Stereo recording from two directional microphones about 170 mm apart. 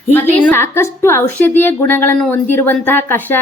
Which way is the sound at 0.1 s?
15° left (ahead or behind).